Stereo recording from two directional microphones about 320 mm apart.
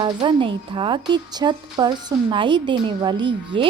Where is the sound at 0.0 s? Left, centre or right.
Centre.